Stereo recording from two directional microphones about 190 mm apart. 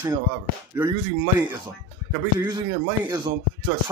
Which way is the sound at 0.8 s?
10° right (ahead or behind).